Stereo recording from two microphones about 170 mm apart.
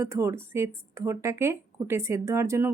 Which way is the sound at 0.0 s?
15° right (ahead or behind).